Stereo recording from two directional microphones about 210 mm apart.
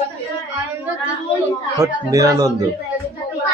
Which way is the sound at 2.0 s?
15° right (ahead or behind).